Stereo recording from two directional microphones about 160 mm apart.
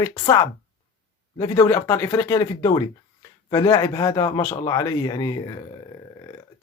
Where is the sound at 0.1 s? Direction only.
25° left (ahead or behind).